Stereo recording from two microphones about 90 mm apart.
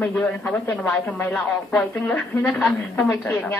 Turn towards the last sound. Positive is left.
turn(degrees=20)  # may be behind; listen again after turning